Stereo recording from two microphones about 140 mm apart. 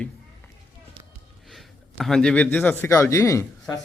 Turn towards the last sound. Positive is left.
turn(degrees=20)  # may be behind; listen again after turning